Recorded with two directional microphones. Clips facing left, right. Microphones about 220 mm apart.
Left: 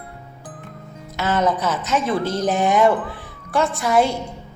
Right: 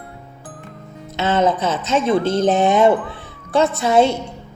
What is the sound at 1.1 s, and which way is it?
A woman's voice, 25° right (ahead or behind).